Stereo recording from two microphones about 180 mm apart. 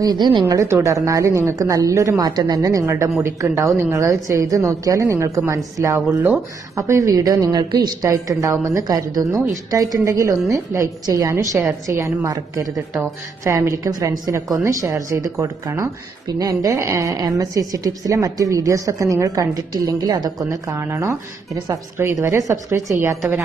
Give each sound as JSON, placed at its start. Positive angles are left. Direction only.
{"t": 0.0, "sound": "speech", "side_deg": -25}